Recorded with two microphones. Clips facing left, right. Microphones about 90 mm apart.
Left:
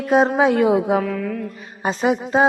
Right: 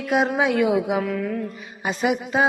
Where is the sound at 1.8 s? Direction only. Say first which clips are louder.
Left 3 dB; 30° left (ahead or behind).